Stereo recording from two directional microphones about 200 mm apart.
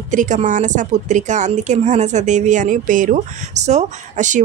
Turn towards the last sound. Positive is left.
turn(degrees=-40)  # may be behind; listen again after turning